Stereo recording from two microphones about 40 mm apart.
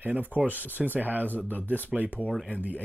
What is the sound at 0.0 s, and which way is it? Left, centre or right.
Speech, right.